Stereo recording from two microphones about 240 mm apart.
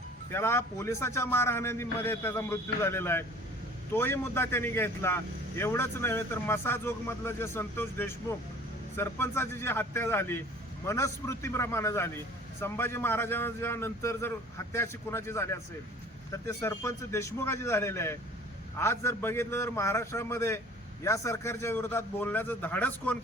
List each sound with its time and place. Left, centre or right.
0.3 s a man's voice: centre